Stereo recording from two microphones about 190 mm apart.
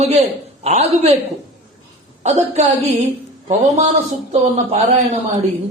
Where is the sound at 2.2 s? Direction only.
35° right (ahead or behind).